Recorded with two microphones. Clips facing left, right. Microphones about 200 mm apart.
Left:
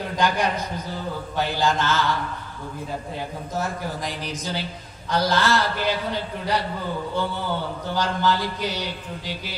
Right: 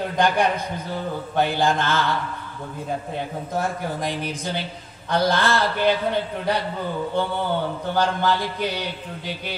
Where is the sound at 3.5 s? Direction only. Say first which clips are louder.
Right 2 dB; 55° right (ahead or behind).